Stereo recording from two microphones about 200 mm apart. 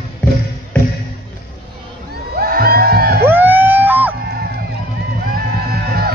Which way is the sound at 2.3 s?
50° right (ahead or behind).